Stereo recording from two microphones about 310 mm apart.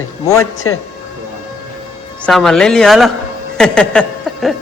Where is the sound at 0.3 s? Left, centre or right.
Centre.